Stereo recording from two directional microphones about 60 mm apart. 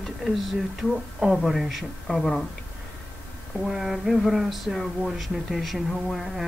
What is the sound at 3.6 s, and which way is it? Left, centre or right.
Speech, centre.